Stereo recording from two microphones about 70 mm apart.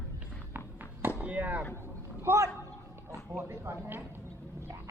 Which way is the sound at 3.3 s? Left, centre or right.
Right.